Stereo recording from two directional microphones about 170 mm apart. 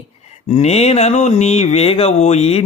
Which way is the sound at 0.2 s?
40° left (ahead or behind).